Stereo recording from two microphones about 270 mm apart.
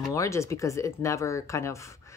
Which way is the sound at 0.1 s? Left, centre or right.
Centre.